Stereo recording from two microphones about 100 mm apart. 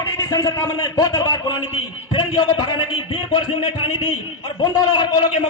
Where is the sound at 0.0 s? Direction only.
35° left (ahead or behind).